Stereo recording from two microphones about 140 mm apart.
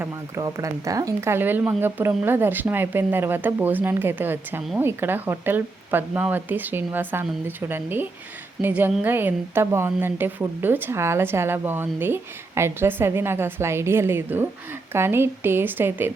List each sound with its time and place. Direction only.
0.0 s a woman's voice: 25° right (ahead or behind)